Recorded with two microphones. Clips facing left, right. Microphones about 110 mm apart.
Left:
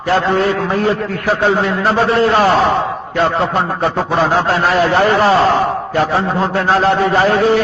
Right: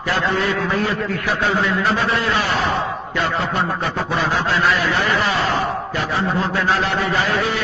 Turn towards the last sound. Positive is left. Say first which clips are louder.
# left 8 dB
turn(degrees=45)  # may be behind; listen again after turning